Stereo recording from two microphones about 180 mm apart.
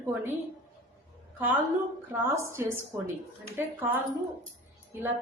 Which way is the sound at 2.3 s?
15° right (ahead or behind).